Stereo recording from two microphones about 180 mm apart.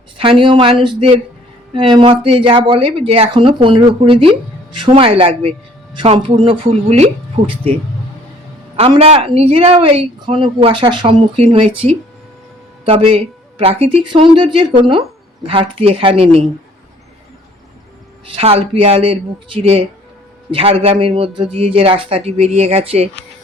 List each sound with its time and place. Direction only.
0.2 s speech: 30° right (ahead or behind)
8.7 s speech: 30° right (ahead or behind)
12.8 s speech: 30° right (ahead or behind)
18.3 s speech: 30° right (ahead or behind)